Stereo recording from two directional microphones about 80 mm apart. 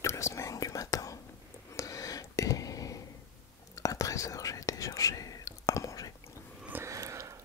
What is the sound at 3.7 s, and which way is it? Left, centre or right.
Whispering, left.